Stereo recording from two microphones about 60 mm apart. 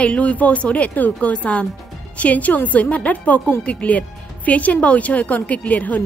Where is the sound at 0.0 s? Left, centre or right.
Left.